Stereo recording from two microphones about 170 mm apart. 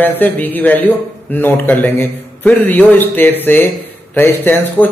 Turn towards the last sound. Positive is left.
turn(degrees=10)  # may be behind; listen again after turning